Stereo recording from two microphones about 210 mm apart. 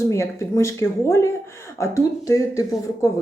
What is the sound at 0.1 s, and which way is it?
A woman's voice, 15° left (ahead or behind).